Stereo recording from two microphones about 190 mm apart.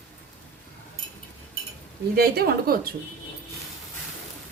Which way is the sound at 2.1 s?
55° right (ahead or behind).